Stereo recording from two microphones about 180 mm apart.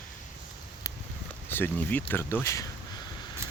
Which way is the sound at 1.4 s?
10° left (ahead or behind).